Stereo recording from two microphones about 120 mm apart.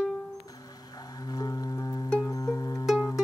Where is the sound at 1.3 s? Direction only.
30° left (ahead or behind).